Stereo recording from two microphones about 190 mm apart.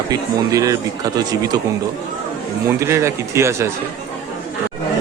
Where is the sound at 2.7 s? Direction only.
15° right (ahead or behind).